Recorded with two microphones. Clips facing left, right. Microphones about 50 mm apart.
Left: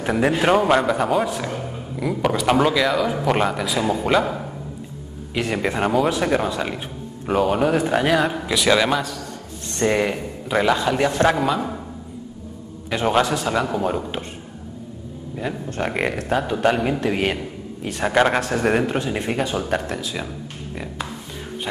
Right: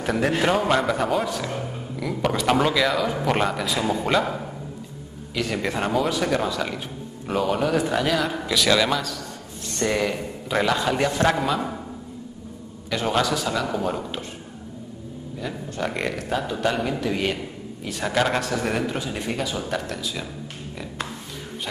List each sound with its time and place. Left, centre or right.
0.0 s a man's voice: centre
5.3 s a man's voice: left
5.6 s a man's voice: centre
6.0 s a man's voice: left
7.7 s a man's voice: left
10.1 s a man's voice: centre
12.9 s speech: centre
13.7 s a man's voice: centre
15.3 s a man's voice: left